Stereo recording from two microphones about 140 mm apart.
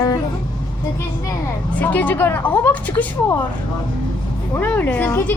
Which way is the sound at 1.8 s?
10° left (ahead or behind).